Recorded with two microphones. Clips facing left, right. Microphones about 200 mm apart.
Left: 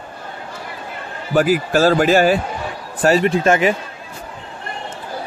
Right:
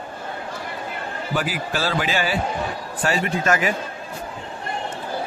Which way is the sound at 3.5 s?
25° left (ahead or behind).